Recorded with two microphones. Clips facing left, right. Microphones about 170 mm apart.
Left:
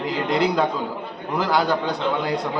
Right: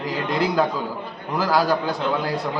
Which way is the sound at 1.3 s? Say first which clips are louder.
Right 1 dB; 5° right (ahead or behind).